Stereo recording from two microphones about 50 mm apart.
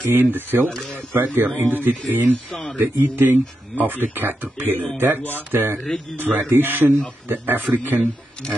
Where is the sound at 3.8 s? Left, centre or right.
Right.